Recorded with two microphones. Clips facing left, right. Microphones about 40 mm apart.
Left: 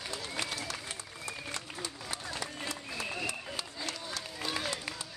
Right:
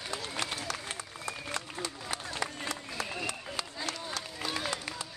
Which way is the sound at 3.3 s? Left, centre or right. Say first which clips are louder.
Right 1 dB; right.